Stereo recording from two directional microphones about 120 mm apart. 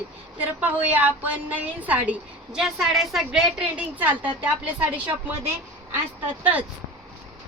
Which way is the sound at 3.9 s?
15° right (ahead or behind).